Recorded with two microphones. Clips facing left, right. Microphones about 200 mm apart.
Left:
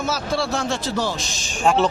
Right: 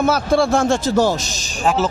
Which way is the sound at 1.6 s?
5° right (ahead or behind).